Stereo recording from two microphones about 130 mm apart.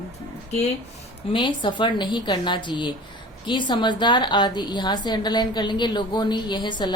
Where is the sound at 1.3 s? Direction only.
35° left (ahead or behind).